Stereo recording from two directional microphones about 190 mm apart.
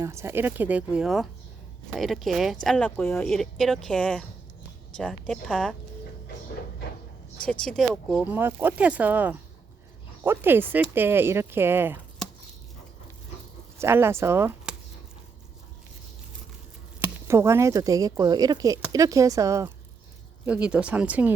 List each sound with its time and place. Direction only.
0.0 s speech: 15° right (ahead or behind); by 5.7 s 5° left (ahead or behind)
7.6 s speech: centre (ahead or behind)
13.7 s speech: 15° right (ahead or behind)
17.0 s speech: 15° right (ahead or behind)
20.4 s speech: 5° right (ahead or behind)